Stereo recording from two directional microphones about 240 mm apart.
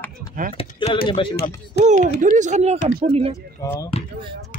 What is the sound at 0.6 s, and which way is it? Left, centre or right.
Speech, left.